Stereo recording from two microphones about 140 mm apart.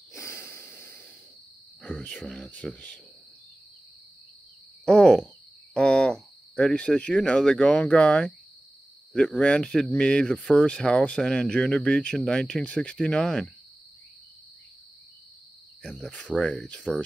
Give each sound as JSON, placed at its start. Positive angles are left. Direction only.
{"t": 0.1, "sound": "a sound", "side_deg": 20}
{"t": 1.8, "sound": "speech", "side_deg": 10}
{"t": 4.8, "sound": "cricket", "side_deg": 5}
{"t": 5.8, "sound": "speech", "side_deg": 5}
{"t": 16.3, "sound": "speech", "side_deg": 5}